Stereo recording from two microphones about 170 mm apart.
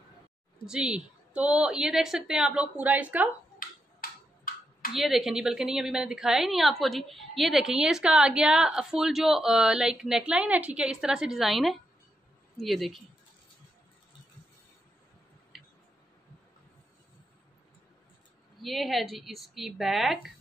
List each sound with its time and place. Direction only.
0.7 s a woman's voice: 5° right (ahead or behind)
4.0 s tick-tock: 60° left (ahead or behind)
4.9 s a woman's voice: centre (ahead or behind)
15.5 s a sound: centre (ahead or behind)
18.6 s a woman's voice: centre (ahead or behind)